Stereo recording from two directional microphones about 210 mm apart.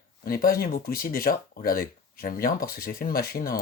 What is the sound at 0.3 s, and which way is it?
Speech, 45° left (ahead or behind).